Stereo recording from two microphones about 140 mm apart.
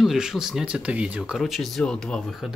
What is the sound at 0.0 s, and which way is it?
Speech, 5° right (ahead or behind).